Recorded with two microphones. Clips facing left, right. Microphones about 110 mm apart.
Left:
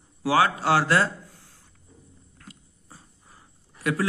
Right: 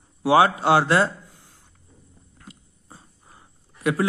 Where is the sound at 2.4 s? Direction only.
20° right (ahead or behind).